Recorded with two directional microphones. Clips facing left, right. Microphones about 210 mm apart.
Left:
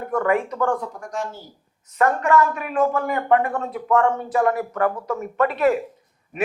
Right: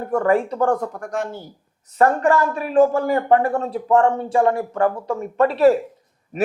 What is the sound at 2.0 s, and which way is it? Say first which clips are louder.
Speech: right 2 dB; 35° right (ahead or behind).